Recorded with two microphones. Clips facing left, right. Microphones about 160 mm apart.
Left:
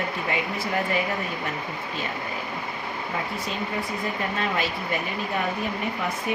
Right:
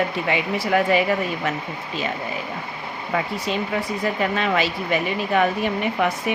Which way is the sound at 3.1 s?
90° right.